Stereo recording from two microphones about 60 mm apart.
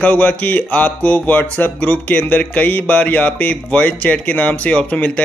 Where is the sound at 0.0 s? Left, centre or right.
Left.